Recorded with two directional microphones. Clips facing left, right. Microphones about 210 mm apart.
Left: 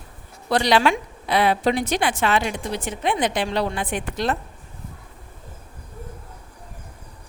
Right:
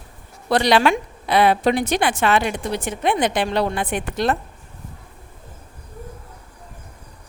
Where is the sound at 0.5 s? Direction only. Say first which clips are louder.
Right 2 dB; 60° right (ahead or behind).